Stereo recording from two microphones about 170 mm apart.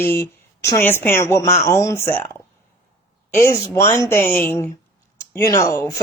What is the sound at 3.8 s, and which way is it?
Speech, 15° left (ahead or behind).